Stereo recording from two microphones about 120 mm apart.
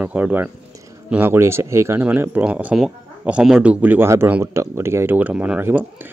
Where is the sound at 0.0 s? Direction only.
15° right (ahead or behind).